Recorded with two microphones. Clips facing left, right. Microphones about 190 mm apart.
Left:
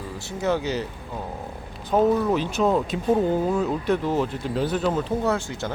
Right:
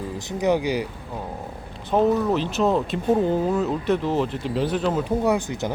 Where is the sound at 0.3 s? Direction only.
15° right (ahead or behind).